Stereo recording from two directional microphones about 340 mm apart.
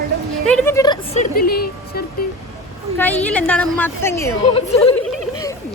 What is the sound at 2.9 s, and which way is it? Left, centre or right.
A woman's voice, centre.